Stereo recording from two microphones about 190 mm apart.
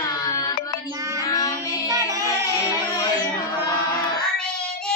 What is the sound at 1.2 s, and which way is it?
Child singing, 20° left (ahead or behind).